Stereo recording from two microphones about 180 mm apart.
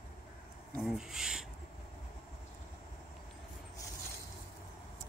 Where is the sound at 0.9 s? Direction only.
5° right (ahead or behind).